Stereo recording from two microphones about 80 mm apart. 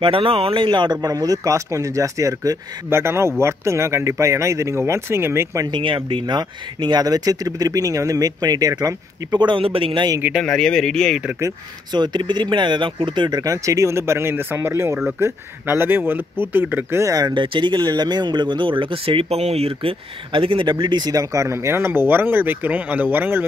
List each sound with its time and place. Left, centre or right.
0.0 s speech: right
1.0 s speech: right
5.7 s speech: right
9.4 s a man's voice: right
10.4 s speech: centre
11.9 s speech: right
13.4 s speech: right
17.0 s speech: right
17.3 s speech: right
20.3 s speech: right
20.8 s speech: right